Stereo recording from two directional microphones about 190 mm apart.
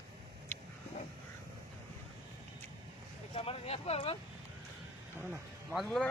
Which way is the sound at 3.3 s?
30° left (ahead or behind).